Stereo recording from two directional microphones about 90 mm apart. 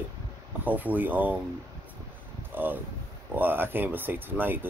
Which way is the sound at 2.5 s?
20° right (ahead or behind).